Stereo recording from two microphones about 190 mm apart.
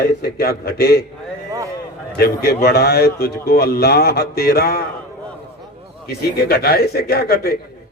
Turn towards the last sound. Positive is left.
turn(degrees=55)  # may be behind; listen again after turning